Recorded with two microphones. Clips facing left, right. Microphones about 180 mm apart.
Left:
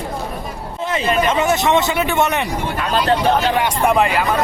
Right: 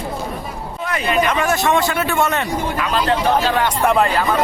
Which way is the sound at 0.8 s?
25° left (ahead or behind).